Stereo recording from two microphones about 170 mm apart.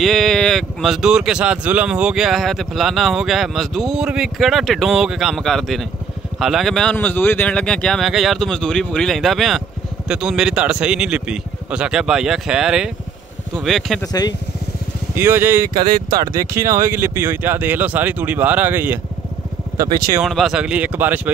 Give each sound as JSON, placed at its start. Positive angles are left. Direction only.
{"t": 0.0, "sound": "speech", "side_deg": 0}
{"t": 15.1, "sound": "speech", "side_deg": -15}
{"t": 20.2, "sound": "speech", "side_deg": 0}